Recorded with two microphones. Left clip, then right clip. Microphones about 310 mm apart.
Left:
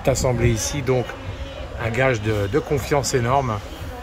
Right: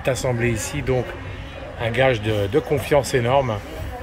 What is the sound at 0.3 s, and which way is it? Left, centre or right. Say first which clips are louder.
Speech: left 1 dB; centre.